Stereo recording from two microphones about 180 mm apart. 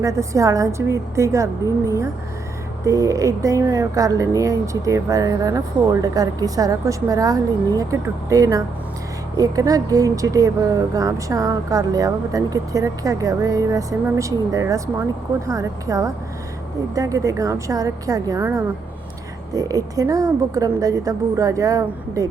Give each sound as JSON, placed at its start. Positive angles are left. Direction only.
{"t": 0.0, "sound": "a woman's voice", "side_deg": -15}